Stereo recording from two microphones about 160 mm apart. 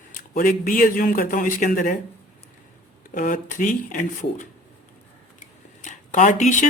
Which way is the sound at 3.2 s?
55° left (ahead or behind).